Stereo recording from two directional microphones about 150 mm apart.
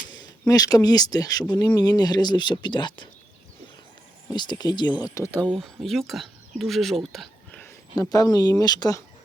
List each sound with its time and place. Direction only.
0.1 s speech: 25° left (ahead or behind)
4.3 s speech: 30° left (ahead or behind)
5.5 s speech: centre (ahead or behind)
7.9 s speech: 25° left (ahead or behind)